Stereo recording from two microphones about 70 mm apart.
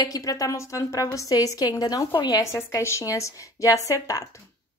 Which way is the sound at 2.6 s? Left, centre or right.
Left.